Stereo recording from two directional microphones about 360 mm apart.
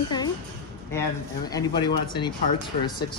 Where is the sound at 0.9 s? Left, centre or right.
Centre.